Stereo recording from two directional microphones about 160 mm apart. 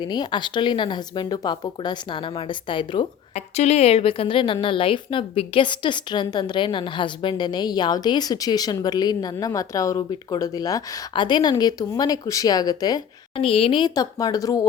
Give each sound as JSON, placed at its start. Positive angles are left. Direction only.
{"t": 0.0, "sound": "a woman's voice", "side_deg": 30}
{"t": 3.3, "sound": "a woman's voice", "side_deg": 45}